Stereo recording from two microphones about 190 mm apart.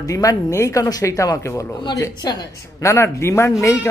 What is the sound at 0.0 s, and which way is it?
Speech, 20° left (ahead or behind).